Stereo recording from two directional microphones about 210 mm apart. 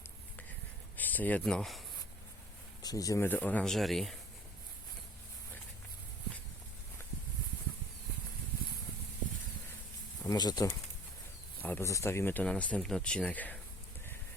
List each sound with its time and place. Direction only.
0.9 s speech: 10° left (ahead or behind)
2.8 s speech: 15° left (ahead or behind)
10.2 s speech: 20° left (ahead or behind)